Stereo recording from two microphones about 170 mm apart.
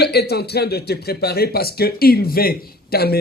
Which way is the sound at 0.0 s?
75° left (ahead or behind).